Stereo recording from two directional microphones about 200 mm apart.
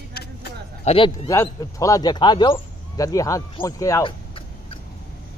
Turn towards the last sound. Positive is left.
turn(degrees=15)  # may be behind; listen again after turning